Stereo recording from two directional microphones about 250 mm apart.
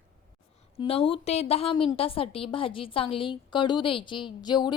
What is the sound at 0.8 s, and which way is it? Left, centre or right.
A woman's voice, left.